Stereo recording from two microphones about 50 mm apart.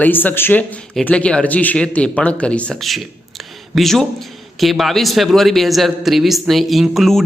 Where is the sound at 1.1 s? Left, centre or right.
Left.